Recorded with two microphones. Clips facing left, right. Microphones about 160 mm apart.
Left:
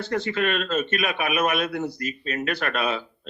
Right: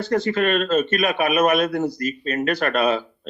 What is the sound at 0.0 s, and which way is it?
A man's voice, 40° right (ahead or behind).